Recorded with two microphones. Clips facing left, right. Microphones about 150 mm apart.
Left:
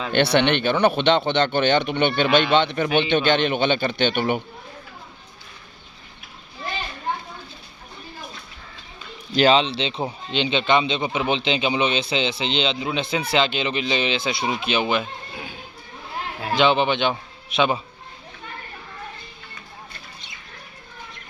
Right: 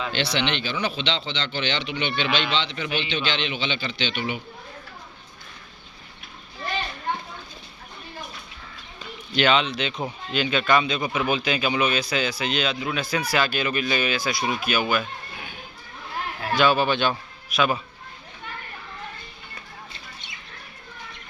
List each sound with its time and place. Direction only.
0.1 s speech: 55° left (ahead or behind)
9.3 s a man's voice: 35° left (ahead or behind)